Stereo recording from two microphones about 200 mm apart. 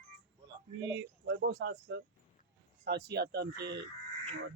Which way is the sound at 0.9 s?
60° right (ahead or behind).